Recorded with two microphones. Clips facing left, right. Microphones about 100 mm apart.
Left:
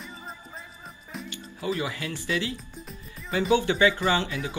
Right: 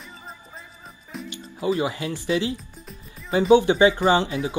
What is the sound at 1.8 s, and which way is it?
Speech, 25° right (ahead or behind).